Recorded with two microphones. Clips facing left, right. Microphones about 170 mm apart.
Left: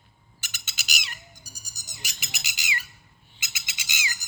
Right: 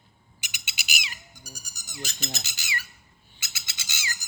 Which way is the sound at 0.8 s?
5° right (ahead or behind).